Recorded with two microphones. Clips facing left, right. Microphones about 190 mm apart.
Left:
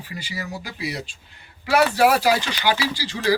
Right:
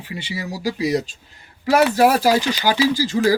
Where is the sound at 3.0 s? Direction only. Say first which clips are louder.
Right 10 dB; 45° right (ahead or behind).